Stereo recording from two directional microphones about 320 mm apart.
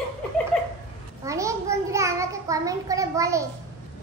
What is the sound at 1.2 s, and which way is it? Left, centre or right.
A child's voice, centre.